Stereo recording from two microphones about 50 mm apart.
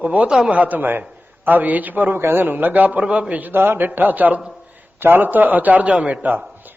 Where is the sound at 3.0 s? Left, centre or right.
Right.